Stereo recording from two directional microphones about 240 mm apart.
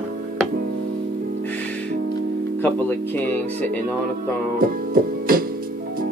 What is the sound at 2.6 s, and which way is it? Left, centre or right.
Speech, centre.